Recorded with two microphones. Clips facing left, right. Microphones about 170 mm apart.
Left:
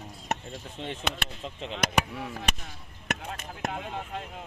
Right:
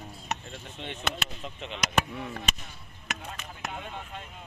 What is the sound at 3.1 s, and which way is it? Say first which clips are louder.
Chop: left 4 dB; 55° left (ahead or behind).